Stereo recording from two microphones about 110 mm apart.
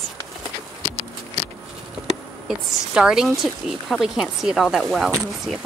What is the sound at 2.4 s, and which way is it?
A woman's voice, 5° right (ahead or behind).